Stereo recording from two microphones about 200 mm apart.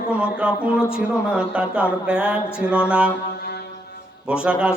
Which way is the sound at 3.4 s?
55° left (ahead or behind).